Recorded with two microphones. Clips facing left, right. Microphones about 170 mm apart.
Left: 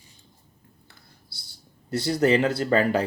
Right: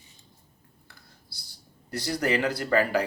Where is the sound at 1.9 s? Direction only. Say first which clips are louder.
Left 6 dB; 25° left (ahead or behind).